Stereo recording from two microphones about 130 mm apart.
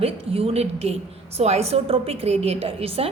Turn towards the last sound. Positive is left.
turn(degrees=-50)  # may be behind; listen again after turning